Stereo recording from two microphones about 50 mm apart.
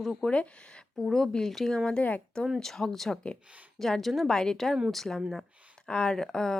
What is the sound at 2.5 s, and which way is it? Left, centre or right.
Speech, centre.